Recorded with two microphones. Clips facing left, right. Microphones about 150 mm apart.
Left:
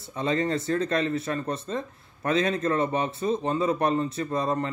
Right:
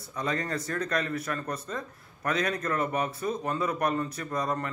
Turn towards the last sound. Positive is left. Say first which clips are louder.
# left 4 dB
turn(degrees=25)  # may be behind; listen again after turning